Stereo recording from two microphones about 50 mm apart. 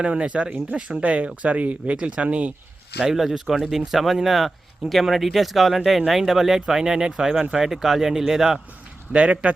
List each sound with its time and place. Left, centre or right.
0.0 s speech: right
3.0 s speech: centre
9.1 s speech: right